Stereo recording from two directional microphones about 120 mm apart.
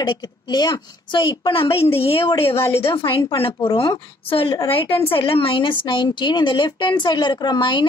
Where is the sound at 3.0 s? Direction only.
45° left (ahead or behind).